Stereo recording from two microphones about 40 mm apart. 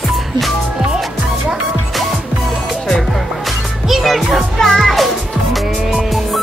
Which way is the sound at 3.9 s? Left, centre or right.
Centre.